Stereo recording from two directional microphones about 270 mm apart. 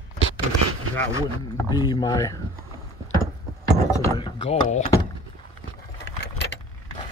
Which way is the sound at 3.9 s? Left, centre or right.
Centre.